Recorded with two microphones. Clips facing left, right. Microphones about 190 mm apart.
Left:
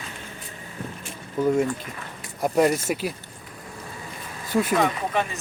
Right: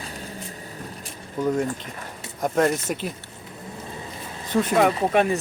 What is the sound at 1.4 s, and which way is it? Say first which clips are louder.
Speech: left 2 dB; 5° left (ahead or behind).